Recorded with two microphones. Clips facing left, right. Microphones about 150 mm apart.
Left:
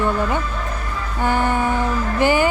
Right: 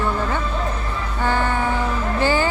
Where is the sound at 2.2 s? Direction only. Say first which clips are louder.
Left 3 dB; 15° left (ahead or behind).